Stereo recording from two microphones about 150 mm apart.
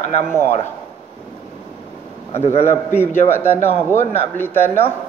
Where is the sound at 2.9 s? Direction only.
15° left (ahead or behind).